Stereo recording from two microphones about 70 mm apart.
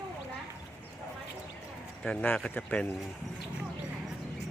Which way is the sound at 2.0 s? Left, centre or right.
Centre.